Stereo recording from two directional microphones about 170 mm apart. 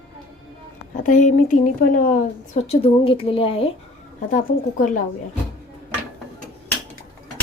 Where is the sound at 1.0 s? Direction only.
50° left (ahead or behind).